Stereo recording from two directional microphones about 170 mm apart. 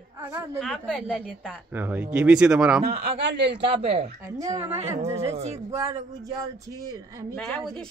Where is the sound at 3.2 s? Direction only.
90° right.